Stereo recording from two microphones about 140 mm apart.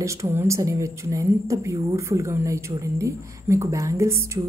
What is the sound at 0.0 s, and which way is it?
A woman's voice, 20° right (ahead or behind).